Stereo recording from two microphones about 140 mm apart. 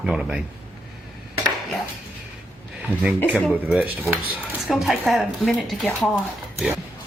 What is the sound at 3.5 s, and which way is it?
Chopping, 10° right (ahead or behind).